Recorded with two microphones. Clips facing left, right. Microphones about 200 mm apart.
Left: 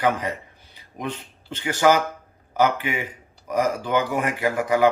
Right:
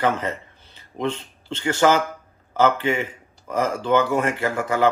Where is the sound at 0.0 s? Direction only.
15° left (ahead or behind).